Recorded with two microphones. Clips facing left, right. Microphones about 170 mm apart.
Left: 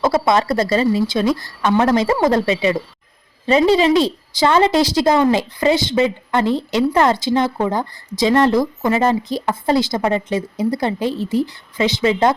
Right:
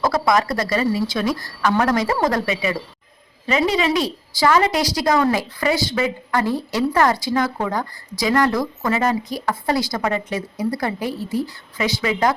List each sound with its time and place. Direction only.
0.0 s speech: 25° left (ahead or behind)